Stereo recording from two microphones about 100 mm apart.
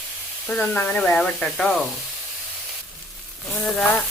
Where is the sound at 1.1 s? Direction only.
5° left (ahead or behind).